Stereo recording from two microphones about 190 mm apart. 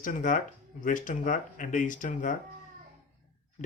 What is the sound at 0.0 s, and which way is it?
Speech, 45° left (ahead or behind).